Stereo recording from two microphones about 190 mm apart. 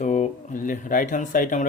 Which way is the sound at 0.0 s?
40° left (ahead or behind).